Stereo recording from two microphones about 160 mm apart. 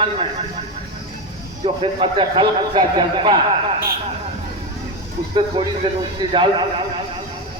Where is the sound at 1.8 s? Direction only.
30° right (ahead or behind).